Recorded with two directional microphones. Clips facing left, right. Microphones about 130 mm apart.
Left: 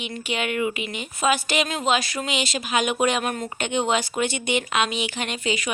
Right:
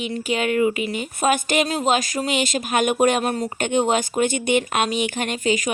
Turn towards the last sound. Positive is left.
turn(degrees=-45)  # may be behind; listen again after turning